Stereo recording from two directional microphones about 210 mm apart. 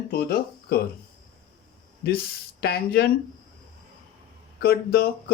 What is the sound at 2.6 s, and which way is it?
Speech, 50° left (ahead or behind).